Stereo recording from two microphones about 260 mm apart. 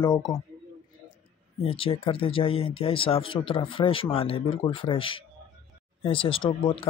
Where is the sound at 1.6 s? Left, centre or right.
Left.